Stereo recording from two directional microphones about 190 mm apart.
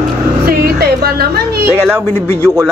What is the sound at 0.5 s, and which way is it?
Music, 55° right (ahead or behind).